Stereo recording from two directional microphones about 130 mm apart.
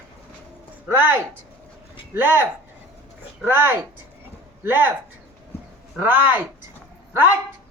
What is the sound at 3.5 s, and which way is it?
Speech, 15° right (ahead or behind).